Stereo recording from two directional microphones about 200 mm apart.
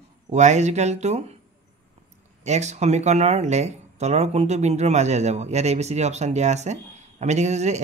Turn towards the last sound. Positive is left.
turn(degrees=-35)  # may be behind; listen again after turning